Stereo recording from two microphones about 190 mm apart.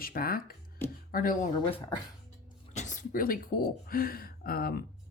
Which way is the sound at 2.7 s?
40° left (ahead or behind).